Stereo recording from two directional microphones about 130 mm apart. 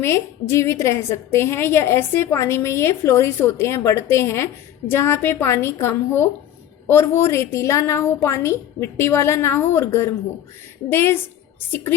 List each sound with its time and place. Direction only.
0.0 s a woman's voice: 20° left (ahead or behind)